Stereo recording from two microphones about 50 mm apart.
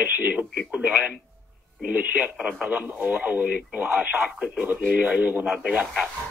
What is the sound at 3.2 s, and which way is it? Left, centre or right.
Speech, right.